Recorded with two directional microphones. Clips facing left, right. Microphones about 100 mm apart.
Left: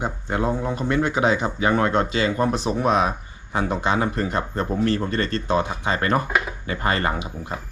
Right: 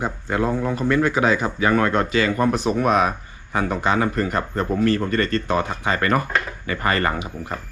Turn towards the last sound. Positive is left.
turn(degrees=10)  # may be behind; listen again after turning